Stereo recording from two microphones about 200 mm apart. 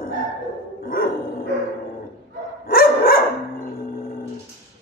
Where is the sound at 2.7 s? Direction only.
50° left (ahead or behind).